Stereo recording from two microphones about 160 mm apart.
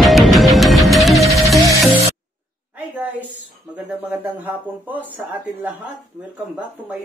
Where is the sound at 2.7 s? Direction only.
10° right (ahead or behind).